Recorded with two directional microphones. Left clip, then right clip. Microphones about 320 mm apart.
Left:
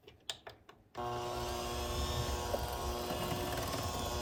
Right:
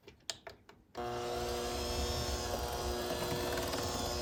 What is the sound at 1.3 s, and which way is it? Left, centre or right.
Vehicle, centre.